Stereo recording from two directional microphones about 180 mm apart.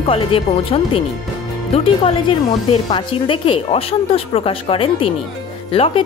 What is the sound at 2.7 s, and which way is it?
A woman's voice, 30° left (ahead or behind).